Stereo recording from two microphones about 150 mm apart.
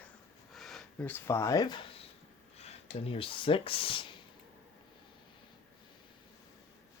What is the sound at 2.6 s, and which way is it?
Speech, 45° left (ahead or behind).